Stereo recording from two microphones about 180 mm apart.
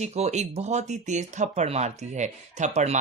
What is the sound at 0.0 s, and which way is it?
Speech, 40° right (ahead or behind).